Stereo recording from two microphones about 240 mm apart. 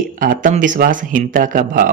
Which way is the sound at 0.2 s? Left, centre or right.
Right.